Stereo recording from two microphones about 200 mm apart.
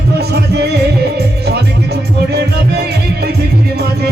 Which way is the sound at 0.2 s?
55° right (ahead or behind).